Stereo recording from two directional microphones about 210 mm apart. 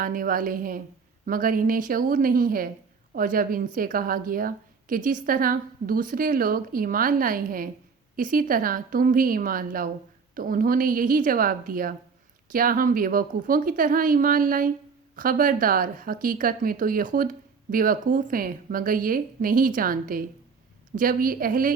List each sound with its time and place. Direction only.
0.0 s a woman's voice: 40° right (ahead or behind)